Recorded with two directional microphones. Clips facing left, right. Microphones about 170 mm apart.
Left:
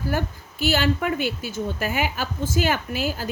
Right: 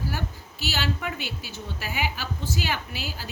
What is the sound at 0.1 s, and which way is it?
A woman's voice, 50° left (ahead or behind).